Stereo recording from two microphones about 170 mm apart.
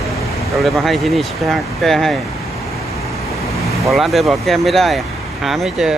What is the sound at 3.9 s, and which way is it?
Speech, centre (ahead or behind).